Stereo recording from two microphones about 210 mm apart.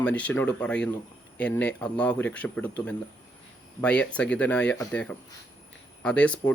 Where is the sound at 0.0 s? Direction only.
5° left (ahead or behind).